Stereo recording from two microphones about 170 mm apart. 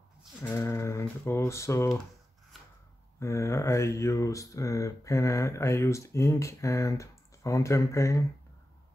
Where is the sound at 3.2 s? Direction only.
15° left (ahead or behind).